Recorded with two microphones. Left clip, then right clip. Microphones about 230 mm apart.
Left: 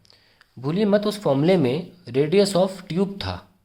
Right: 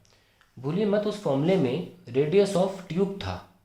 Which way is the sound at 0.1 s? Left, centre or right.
Left.